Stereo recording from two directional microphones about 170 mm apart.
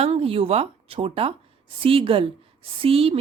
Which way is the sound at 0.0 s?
35° right (ahead or behind).